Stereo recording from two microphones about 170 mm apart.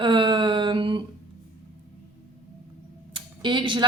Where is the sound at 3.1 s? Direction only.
30° right (ahead or behind).